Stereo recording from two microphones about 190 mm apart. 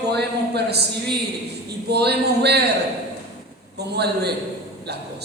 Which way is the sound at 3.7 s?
60° right (ahead or behind).